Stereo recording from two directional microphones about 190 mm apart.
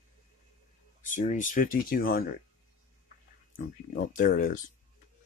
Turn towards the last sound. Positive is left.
turn(degrees=45)  # may be behind; listen again after turning